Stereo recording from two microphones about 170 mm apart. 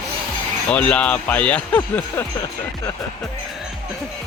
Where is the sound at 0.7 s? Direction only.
10° left (ahead or behind).